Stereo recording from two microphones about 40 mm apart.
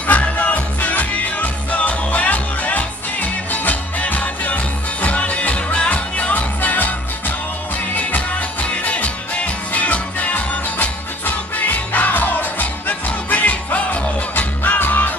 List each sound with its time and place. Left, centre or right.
0.0 s music: left
6.3 s music: left
14.6 s music: left